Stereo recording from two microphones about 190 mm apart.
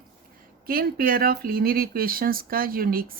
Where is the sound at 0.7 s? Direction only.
50° right (ahead or behind).